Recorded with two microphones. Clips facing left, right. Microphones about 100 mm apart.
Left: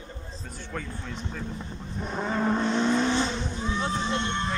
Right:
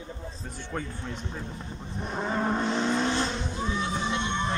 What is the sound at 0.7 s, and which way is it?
Speech, 25° right (ahead or behind).